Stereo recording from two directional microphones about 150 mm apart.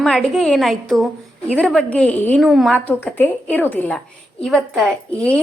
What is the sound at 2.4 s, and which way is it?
Speech, centre (ahead or behind).